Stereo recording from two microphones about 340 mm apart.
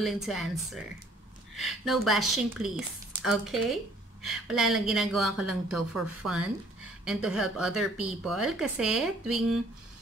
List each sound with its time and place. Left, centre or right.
0.0 s a woman's voice: centre